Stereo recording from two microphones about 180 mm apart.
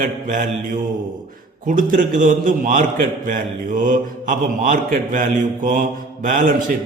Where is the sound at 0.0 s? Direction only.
50° right (ahead or behind).